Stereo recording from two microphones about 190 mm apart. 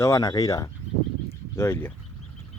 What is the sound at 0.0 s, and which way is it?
Speech, 15° left (ahead or behind).